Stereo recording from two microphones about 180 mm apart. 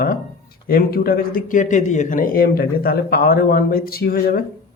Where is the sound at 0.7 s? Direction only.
55° left (ahead or behind).